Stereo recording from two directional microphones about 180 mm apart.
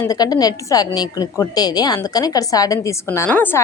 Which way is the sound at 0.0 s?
20° left (ahead or behind).